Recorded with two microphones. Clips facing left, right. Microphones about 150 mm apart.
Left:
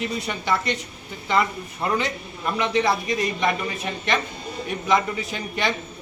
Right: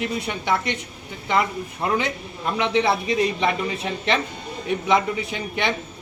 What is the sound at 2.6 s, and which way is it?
Speech, 25° right (ahead or behind).